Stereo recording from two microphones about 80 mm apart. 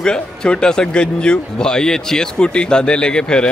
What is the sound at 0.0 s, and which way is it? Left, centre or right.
Speech, centre.